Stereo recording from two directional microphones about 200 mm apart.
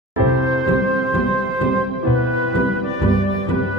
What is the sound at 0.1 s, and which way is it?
Music, centre (ahead or behind).